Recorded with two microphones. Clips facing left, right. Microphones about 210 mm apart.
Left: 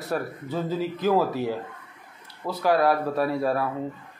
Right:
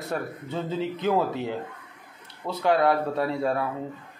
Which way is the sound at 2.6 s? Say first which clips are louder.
Even; 25° right (ahead or behind).